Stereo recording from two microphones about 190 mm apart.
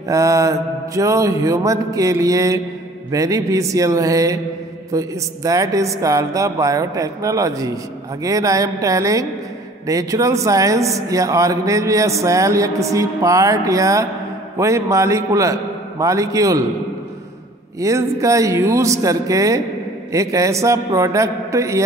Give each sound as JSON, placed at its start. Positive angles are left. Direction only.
{"t": 0.1, "sound": "a man's voice", "side_deg": -15}
{"t": 17.7, "sound": "a man's voice", "side_deg": -15}